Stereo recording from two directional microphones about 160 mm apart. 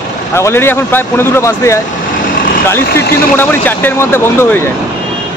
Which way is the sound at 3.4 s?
10° left (ahead or behind).